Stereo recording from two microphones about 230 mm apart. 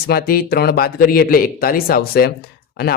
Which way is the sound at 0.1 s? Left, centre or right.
Left.